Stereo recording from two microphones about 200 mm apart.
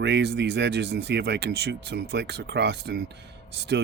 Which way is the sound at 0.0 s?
55° right (ahead or behind).